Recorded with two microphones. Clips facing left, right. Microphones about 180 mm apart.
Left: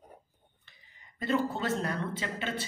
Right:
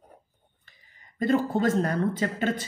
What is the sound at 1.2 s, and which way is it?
Speech, 45° right (ahead or behind).